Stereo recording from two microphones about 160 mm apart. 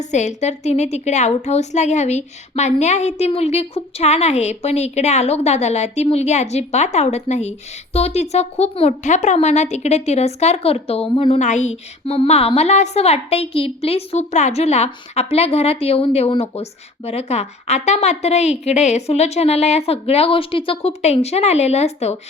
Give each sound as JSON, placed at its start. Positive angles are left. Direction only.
{"t": 0.0, "sound": "a woman's voice", "side_deg": 45}
{"t": 11.3, "sound": "a woman's voice", "side_deg": 50}